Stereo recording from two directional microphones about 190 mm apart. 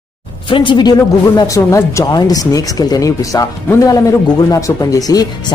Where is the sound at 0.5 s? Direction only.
25° left (ahead or behind).